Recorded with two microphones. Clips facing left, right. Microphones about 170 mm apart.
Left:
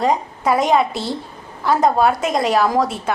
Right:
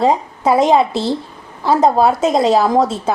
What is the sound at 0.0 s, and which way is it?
A woman's voice, 25° right (ahead or behind).